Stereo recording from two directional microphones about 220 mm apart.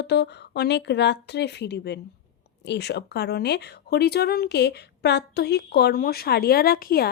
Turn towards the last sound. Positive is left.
turn(degrees=45)  # may be behind; listen again after turning